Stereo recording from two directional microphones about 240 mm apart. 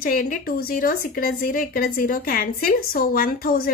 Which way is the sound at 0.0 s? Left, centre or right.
Left.